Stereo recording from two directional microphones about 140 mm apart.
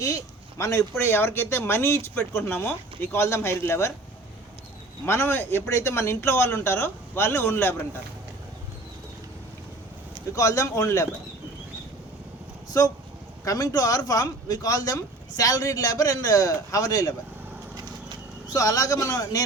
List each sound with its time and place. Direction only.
0.6 s speech: 20° left (ahead or behind)
5.0 s speech: 15° left (ahead or behind)
10.3 s a man's voice: 25° left (ahead or behind)
13.4 s a man's voice: 25° left (ahead or behind)
17.7 s horse: 30° right (ahead or behind)
18.5 s a man's voice: 25° left (ahead or behind)